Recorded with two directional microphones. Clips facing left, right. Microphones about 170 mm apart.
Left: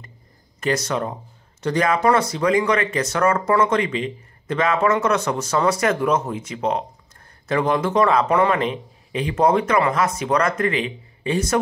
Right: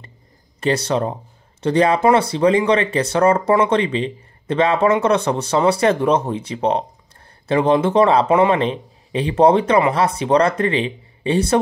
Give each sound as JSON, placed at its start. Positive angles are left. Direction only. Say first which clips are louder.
{"t": 0.6, "sound": "speech", "louder": "right 4 dB", "side_deg": -30}